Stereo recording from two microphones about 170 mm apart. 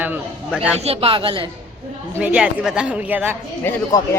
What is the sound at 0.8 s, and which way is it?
Speech, 35° right (ahead or behind).